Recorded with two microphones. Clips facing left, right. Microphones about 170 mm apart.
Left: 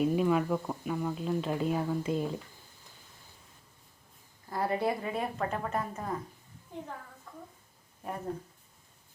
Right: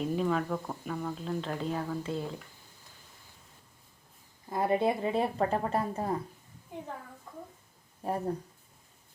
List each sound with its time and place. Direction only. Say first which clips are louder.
0.0 s speech: left 3 dB; 10° left (ahead or behind)
4.4 s speech: right 3 dB; 20° right (ahead or behind)
6.7 s a woman's voice: even; 10° right (ahead or behind)
8.0 s speech: right 6 dB; 30° right (ahead or behind)